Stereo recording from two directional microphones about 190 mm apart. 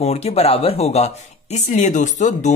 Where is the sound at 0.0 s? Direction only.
35° left (ahead or behind).